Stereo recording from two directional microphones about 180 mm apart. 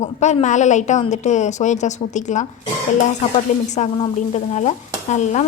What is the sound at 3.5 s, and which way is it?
A woman's voice, 40° left (ahead or behind).